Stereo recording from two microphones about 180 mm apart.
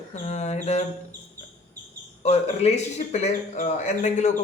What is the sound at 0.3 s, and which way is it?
Bird, 40° left (ahead or behind).